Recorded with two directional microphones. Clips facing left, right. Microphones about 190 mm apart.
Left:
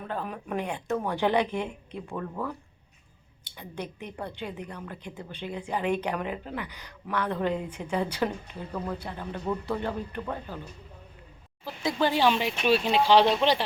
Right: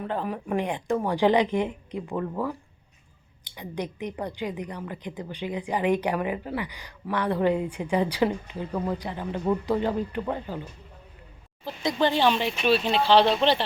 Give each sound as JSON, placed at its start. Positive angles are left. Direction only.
{"t": 0.1, "sound": "a woman's voice", "side_deg": -15}
{"t": 11.6, "sound": "speech", "side_deg": 5}